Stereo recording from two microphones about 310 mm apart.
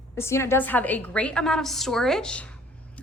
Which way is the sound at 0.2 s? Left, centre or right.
Centre.